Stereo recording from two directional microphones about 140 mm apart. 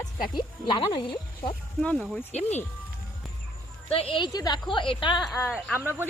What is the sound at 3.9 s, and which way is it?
Speech, 45° left (ahead or behind).